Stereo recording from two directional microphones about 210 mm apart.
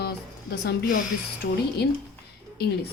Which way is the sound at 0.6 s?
50° left (ahead or behind).